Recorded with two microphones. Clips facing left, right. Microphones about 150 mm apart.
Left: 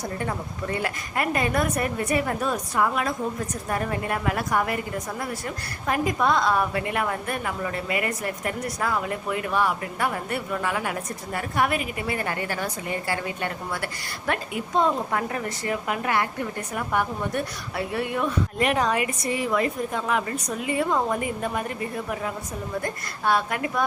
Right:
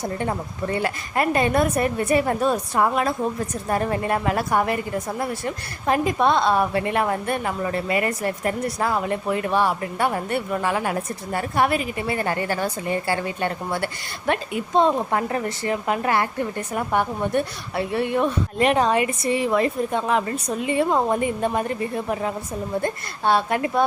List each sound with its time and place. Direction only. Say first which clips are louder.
0.0 s a woman's voice: right 4 dB; 30° right (ahead or behind)
5.8 s a woman's voice: right 4 dB; 30° right (ahead or behind)